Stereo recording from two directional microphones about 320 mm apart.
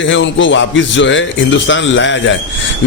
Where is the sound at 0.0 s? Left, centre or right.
Left.